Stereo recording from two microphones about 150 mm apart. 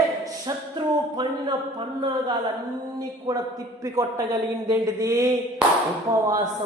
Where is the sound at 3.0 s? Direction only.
25° right (ahead or behind).